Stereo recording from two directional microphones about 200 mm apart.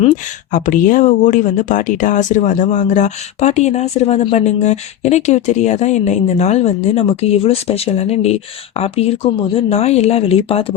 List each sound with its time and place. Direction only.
0.5 s speech: 40° left (ahead or behind)